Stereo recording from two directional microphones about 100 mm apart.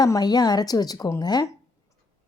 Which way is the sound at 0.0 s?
40° left (ahead or behind).